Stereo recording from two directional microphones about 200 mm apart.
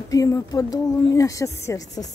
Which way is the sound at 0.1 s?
15° left (ahead or behind).